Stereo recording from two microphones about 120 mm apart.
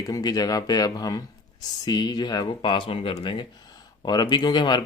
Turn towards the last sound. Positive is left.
turn(degrees=35)  # may be behind; listen again after turning